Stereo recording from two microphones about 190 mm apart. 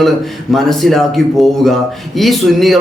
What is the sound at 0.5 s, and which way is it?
Speech, centre (ahead or behind).